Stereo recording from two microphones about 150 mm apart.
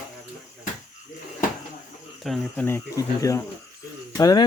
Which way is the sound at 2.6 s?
20° left (ahead or behind).